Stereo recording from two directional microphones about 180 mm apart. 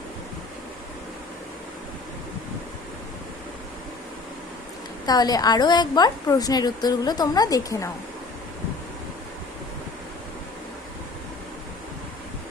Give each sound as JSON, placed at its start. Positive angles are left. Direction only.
{"t": 5.0, "sound": "a woman's voice", "side_deg": 20}